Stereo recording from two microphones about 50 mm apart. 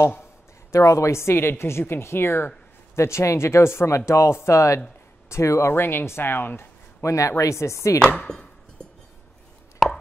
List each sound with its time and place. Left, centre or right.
0.7 s a woman's voice: left
3.0 s a woman's voice: left
7.0 s chopping: left
8.3 s chopping: centre
9.8 s a sound: centre